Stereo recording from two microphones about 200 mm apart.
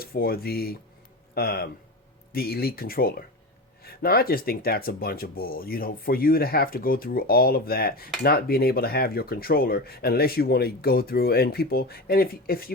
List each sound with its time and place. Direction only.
0.0 s speech: 50° left (ahead or behind)